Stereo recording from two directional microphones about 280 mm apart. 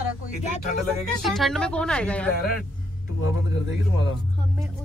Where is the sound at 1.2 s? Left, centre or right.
Centre.